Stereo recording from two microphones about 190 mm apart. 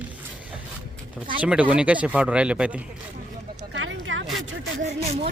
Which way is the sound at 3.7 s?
90° right.